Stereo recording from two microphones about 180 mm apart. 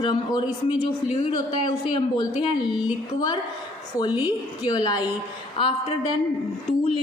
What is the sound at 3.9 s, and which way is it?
Speech, 20° left (ahead or behind).